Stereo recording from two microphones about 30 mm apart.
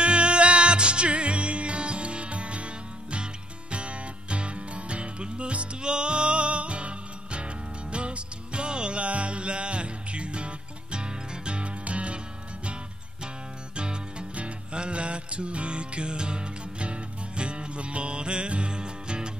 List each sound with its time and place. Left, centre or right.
0.0 s music: right
13.7 s music: right